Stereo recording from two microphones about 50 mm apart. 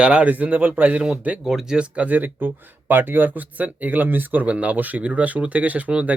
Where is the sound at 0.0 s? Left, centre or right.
Right.